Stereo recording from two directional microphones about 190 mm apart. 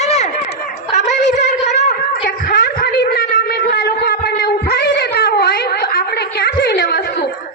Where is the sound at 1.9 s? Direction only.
55° left (ahead or behind).